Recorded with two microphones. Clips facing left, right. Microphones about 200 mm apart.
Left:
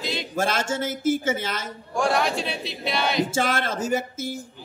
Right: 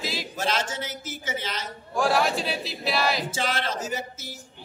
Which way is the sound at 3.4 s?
50° left (ahead or behind).